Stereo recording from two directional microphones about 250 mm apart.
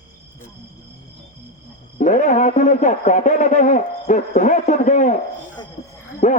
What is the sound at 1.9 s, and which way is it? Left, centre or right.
A man's voice, left.